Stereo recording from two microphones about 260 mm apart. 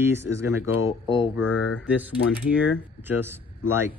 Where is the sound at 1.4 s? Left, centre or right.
Left.